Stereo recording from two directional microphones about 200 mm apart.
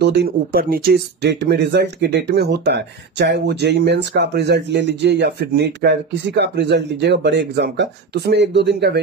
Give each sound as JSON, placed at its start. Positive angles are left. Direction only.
{"t": 0.0, "sound": "speech", "side_deg": -55}